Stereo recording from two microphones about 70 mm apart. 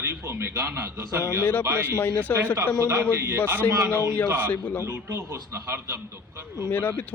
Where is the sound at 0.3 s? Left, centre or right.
Right.